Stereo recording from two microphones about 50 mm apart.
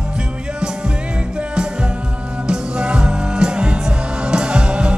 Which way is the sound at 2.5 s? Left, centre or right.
Centre.